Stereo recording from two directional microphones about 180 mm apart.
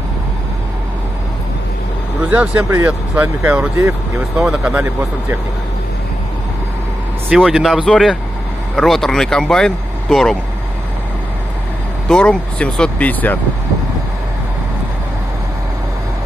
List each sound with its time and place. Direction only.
2.2 s speech: 10° right (ahead or behind)
7.4 s speech: centre (ahead or behind)
12.1 s speech: 5° left (ahead or behind)